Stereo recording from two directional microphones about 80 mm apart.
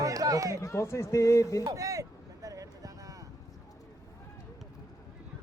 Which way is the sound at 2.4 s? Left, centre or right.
Right.